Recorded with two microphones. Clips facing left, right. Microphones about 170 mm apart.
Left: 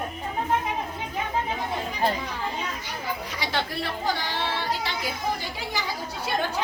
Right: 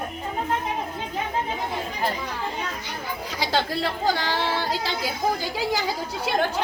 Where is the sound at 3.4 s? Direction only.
90° right.